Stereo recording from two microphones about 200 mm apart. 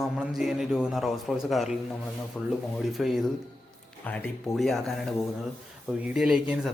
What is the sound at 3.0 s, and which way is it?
A man's voice, centre (ahead or behind).